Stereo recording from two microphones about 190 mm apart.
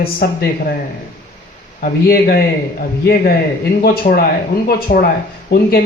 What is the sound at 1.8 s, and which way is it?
Speech, 50° left (ahead or behind).